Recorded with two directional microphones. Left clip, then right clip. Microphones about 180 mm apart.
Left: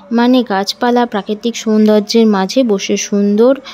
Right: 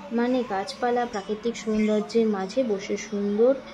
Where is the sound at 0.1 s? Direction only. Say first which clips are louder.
Left 13 dB; 55° left (ahead or behind).